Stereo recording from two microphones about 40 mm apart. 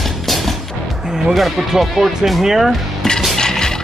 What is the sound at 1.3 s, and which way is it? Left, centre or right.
Speech, centre.